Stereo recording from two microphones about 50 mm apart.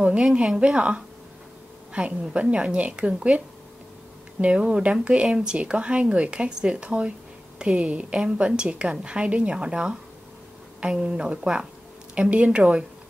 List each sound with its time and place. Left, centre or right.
0.0 s a woman's voice: right